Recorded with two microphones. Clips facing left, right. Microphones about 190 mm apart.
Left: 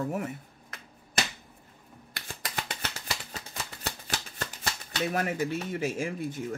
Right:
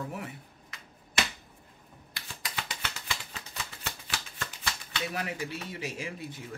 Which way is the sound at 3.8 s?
40° left (ahead or behind).